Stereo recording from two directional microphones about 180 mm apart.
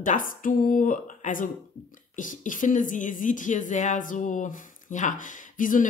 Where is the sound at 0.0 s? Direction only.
50° left (ahead or behind).